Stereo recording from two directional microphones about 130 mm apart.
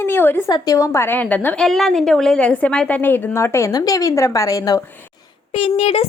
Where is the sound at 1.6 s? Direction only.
Centre (ahead or behind); by 4.8 s 30° left (ahead or behind).